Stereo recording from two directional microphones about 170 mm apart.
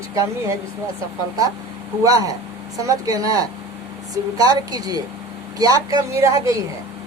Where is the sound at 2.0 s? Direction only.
20° right (ahead or behind).